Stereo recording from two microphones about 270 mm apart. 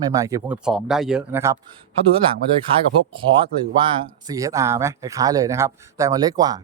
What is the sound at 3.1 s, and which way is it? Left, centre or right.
Speech, centre.